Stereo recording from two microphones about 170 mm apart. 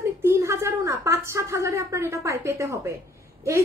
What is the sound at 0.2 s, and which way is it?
A woman's voice, 15° right (ahead or behind).